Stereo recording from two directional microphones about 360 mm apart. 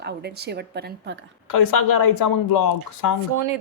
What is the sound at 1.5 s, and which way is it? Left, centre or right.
Speech, left.